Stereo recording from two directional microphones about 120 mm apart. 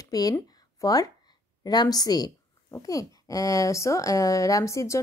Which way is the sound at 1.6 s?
35° left (ahead or behind).